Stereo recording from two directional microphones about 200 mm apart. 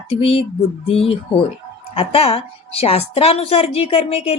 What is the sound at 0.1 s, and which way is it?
Music, 30° left (ahead or behind).